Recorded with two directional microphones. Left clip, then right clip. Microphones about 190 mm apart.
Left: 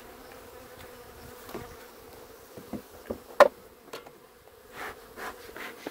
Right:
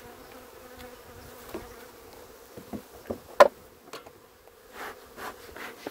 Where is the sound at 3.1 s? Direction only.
30° right (ahead or behind).